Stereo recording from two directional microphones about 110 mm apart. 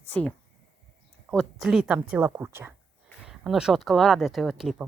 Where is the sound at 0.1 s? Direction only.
15° left (ahead or behind).